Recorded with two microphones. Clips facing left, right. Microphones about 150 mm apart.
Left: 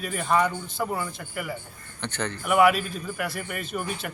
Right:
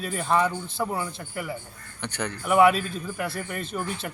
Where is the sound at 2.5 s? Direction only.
25° right (ahead or behind).